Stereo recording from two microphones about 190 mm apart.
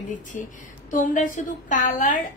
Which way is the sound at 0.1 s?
40° left (ahead or behind).